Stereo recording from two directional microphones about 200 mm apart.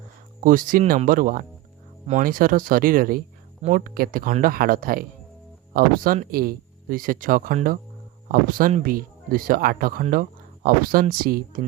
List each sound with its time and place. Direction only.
0.4 s speech: 45° right (ahead or behind)